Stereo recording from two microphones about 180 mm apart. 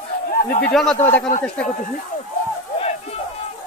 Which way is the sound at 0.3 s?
55° left (ahead or behind).